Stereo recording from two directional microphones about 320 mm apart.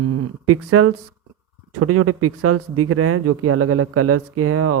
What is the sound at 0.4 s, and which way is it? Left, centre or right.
Speech, right.